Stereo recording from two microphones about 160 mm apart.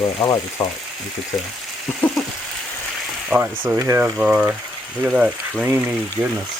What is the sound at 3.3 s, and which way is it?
Speech, 10° right (ahead or behind).